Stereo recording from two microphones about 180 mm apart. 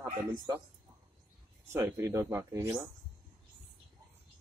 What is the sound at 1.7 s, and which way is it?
Speech, 15° right (ahead or behind).